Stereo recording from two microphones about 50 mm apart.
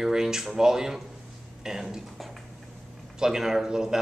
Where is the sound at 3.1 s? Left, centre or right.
Centre.